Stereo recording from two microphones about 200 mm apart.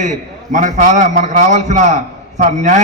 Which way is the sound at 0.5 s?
40° right (ahead or behind).